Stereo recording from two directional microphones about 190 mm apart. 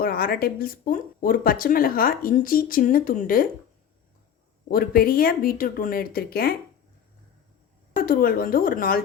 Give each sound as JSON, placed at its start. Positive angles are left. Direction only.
{"t": 0.0, "sound": "a woman's voice", "side_deg": 50}
{"t": 4.7, "sound": "a woman's voice", "side_deg": 50}
{"t": 7.9, "sound": "a woman's voice", "side_deg": 50}